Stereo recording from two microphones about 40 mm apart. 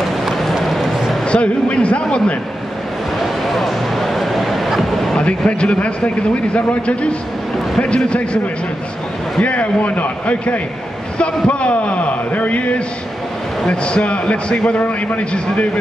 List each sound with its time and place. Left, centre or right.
0.0 s run: centre
0.7 s a sound: centre
1.2 s speech: left
3.2 s a sound: centre
5.1 s speech: left
9.4 s a man's voice: left